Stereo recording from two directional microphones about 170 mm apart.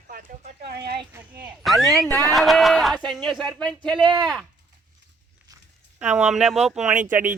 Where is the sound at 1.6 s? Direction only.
Centre (ahead or behind).